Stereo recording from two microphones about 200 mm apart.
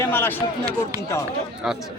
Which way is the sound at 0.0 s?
10° left (ahead or behind).